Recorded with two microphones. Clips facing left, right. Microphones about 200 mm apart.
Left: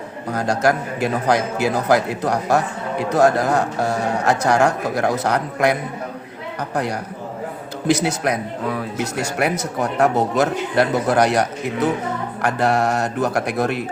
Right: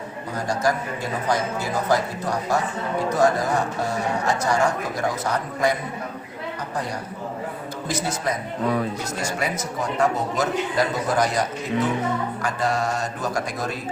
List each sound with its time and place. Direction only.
0.3 s a man's voice: 75° left (ahead or behind)